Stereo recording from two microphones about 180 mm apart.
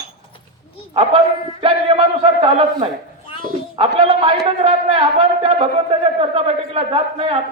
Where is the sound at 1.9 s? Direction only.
30° right (ahead or behind).